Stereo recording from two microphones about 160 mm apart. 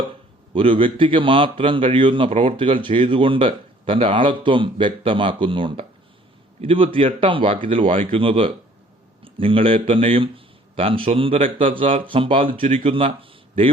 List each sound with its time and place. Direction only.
0.5 s a man's voice: 35° right (ahead or behind)